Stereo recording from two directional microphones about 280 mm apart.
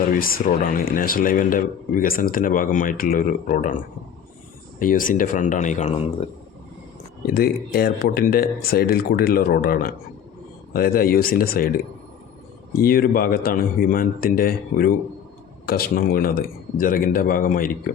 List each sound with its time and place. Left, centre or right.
0.1 s a man's voice: left
4.8 s a man's voice: left
7.3 s speech: left
12.7 s speech: left